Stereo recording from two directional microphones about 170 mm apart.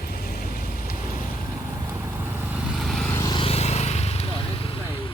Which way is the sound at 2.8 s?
Centre (ahead or behind).